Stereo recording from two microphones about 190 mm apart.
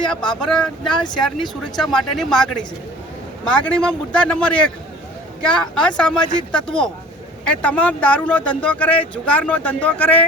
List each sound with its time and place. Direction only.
0.0 s a man's voice: 5° left (ahead or behind)